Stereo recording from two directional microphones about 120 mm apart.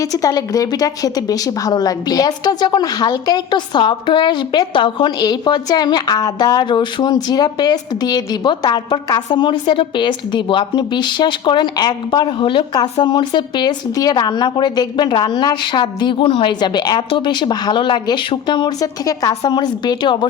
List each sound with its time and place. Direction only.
0.0 s a woman's voice: 30° left (ahead or behind)